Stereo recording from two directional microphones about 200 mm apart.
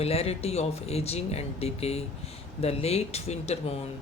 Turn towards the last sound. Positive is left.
turn(degrees=30)  # may be behind; listen again after turning